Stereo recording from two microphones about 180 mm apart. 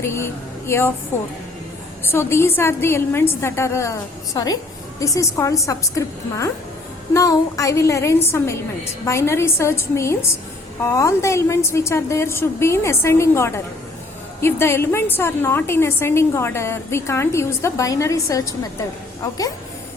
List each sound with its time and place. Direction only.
0.0 s a woman's voice: 15° left (ahead or behind)
2.0 s a woman's voice: 15° left (ahead or behind)
4.9 s a woman's voice: 15° left (ahead or behind)